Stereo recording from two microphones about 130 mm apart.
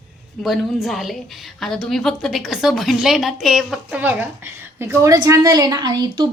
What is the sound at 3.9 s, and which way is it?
A woman's voice, 10° right (ahead or behind).